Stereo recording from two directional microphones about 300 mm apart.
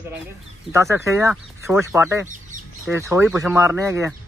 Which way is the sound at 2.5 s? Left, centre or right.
Right.